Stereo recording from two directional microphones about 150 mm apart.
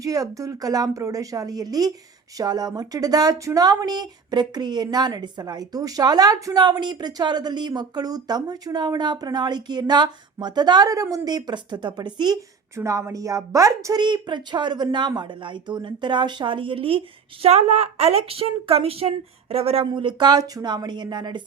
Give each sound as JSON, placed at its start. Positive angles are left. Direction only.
{"t": 0.0, "sound": "speech", "side_deg": -25}